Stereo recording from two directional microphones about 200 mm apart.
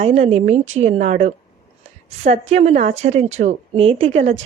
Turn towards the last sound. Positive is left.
turn(degrees=-30)  # may be behind; listen again after turning